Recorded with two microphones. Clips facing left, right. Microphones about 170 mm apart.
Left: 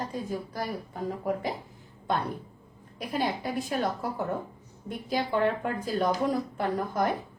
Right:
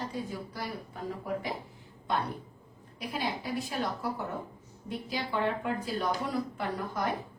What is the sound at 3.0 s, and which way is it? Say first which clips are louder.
A woman's voice: left 5 dB; 50° left (ahead or behind).